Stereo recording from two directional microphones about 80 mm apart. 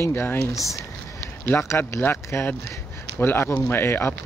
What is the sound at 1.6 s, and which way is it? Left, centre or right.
Speech, left.